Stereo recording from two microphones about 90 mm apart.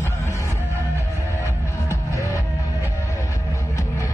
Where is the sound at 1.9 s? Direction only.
35° left (ahead or behind).